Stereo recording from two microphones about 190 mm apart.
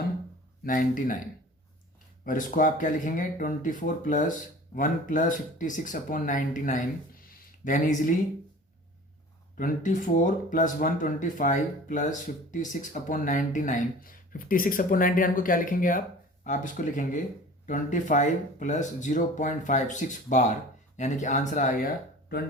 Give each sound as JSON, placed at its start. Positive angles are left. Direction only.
{"t": 0.6, "sound": "speech", "side_deg": 45}
{"t": 2.2, "sound": "speech", "side_deg": 45}
{"t": 9.6, "sound": "speech", "side_deg": 45}